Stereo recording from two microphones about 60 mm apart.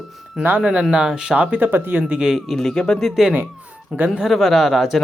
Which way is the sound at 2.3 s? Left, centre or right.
Centre.